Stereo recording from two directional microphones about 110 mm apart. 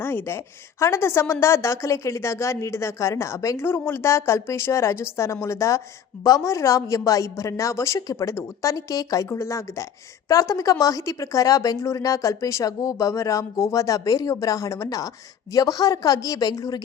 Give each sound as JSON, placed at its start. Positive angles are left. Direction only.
{"t": 0.0, "sound": "a woman's voice", "side_deg": 20}